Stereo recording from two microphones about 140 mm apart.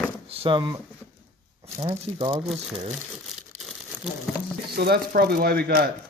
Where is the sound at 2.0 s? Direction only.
45° right (ahead or behind).